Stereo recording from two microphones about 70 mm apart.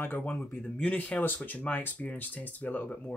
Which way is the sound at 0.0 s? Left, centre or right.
Left.